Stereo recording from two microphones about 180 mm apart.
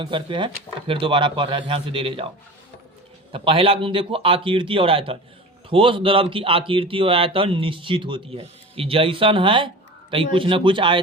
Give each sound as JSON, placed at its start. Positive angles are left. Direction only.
{"t": 0.0, "sound": "speech", "side_deg": -25}
{"t": 3.3, "sound": "a man's voice", "side_deg": -30}